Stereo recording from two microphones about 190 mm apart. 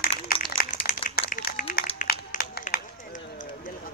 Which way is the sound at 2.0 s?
50° left (ahead or behind).